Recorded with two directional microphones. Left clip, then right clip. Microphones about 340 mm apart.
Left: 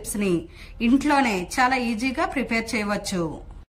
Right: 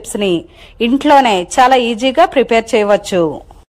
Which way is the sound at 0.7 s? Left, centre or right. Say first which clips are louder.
Right 11 dB; right.